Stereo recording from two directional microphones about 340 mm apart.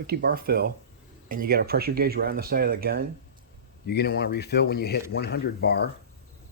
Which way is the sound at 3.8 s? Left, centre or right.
Left.